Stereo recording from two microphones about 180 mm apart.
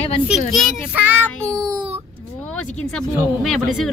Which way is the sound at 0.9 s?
10° right (ahead or behind).